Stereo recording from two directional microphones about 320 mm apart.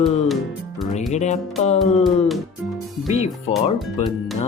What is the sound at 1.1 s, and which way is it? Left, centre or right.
Speech, left.